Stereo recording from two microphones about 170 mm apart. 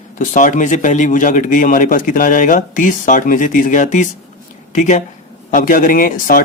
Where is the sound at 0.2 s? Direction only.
50° left (ahead or behind).